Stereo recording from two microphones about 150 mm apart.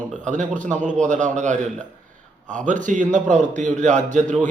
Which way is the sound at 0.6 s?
55° right (ahead or behind).